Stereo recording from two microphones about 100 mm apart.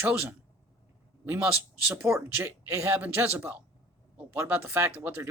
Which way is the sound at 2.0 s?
25° right (ahead or behind).